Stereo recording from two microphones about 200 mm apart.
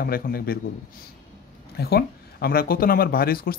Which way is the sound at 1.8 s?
50° left (ahead or behind).